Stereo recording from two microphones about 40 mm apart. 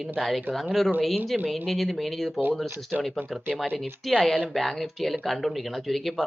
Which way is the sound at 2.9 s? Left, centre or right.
Right.